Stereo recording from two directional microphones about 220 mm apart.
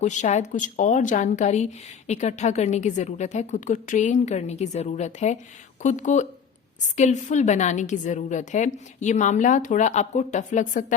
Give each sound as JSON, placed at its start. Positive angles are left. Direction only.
{"t": 0.0, "sound": "a woman's voice", "side_deg": 30}